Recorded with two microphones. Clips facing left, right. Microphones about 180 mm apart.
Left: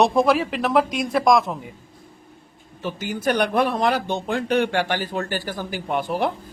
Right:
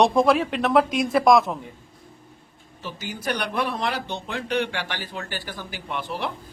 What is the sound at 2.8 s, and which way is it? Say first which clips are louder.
A man's voice: left 6 dB; 50° left (ahead or behind).